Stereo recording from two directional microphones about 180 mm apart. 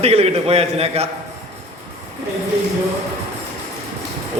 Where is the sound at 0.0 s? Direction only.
35° right (ahead or behind).